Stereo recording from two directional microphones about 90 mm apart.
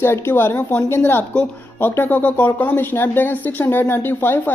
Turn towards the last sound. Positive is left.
turn(degrees=20)  # may be behind; listen again after turning